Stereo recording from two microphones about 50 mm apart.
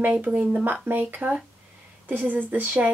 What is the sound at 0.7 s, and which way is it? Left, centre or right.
A woman's voice, right.